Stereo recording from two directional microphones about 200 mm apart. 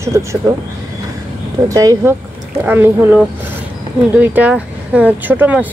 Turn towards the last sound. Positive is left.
turn(degrees=-10)  # may be behind; listen again after turning